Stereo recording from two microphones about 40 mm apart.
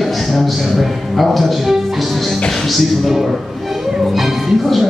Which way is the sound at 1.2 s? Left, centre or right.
Centre.